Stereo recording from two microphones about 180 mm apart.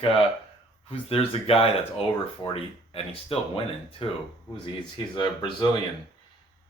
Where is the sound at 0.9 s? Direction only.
30° left (ahead or behind).